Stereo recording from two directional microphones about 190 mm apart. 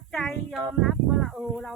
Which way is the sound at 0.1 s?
Centre (ahead or behind).